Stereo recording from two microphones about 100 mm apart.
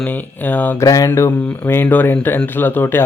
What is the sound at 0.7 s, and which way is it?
Speech, 35° left (ahead or behind).